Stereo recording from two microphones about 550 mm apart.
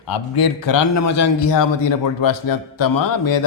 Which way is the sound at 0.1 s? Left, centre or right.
Left.